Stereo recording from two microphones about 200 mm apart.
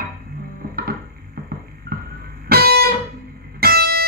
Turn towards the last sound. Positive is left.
turn(degrees=-50)  # may be behind; listen again after turning